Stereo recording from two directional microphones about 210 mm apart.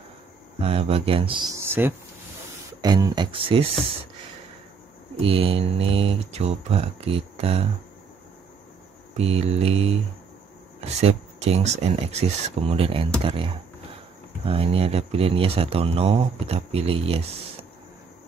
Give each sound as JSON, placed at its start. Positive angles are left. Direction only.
{"t": 0.6, "sound": "speech", "side_deg": -30}
{"t": 1.5, "sound": "speech", "side_deg": -10}
{"t": 5.1, "sound": "speech", "side_deg": -25}
{"t": 9.1, "sound": "speech", "side_deg": -30}